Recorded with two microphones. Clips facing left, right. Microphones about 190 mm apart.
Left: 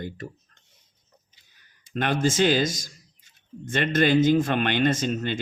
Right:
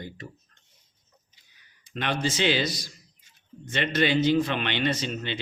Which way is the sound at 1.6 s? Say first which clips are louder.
Left 6 dB; 45° left (ahead or behind).